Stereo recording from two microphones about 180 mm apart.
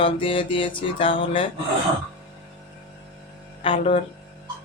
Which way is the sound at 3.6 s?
30° left (ahead or behind).